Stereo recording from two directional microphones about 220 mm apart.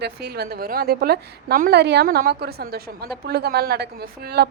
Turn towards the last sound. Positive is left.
turn(degrees=-45)  # may be behind; listen again after turning